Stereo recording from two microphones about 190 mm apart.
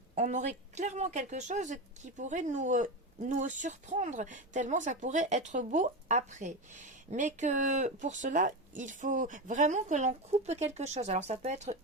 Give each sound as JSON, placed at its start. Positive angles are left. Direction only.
{"t": 0.2, "sound": "speech", "side_deg": -40}